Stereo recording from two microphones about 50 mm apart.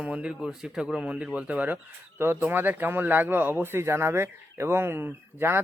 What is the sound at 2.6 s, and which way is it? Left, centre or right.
Speech, right.